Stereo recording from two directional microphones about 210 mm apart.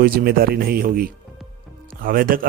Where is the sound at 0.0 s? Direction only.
45° right (ahead or behind).